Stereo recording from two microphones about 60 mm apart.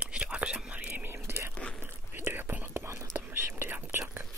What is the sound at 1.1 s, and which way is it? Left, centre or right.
Whispering, right.